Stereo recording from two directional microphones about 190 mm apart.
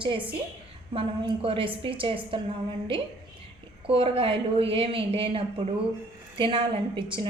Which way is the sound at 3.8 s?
30° right (ahead or behind).